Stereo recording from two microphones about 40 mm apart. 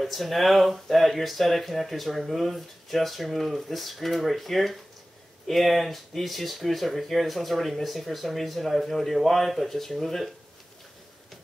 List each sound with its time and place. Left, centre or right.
0.0 s speech: centre